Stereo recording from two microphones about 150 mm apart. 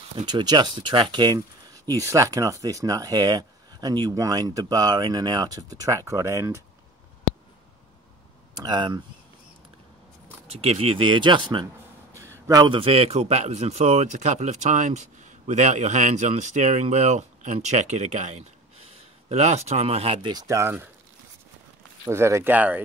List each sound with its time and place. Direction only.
0.3 s speech: 30° right (ahead or behind)
8.5 s speech: 30° right (ahead or behind)
10.5 s speech: 40° right (ahead or behind)
12.2 s a sound: 20° right (ahead or behind)
12.7 s speech: 40° right (ahead or behind); by 20.9 s 15° right (ahead or behind)
22.0 s speech: 15° right (ahead or behind)